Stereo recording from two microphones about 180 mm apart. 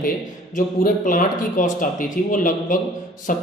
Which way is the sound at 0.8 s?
50° left (ahead or behind).